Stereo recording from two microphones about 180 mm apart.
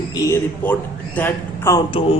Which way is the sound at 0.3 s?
10° left (ahead or behind).